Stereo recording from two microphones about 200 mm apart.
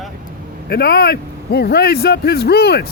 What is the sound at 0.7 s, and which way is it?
Speech, 50° left (ahead or behind).